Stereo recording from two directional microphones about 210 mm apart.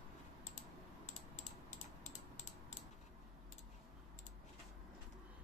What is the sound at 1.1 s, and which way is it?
Coin, 35° left (ahead or behind).